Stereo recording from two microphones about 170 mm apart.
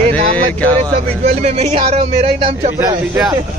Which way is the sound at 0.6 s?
10° left (ahead or behind).